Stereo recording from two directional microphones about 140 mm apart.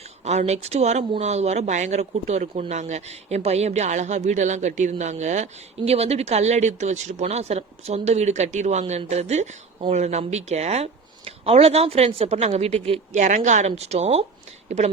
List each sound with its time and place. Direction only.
0.3 s speech: 50° right (ahead or behind)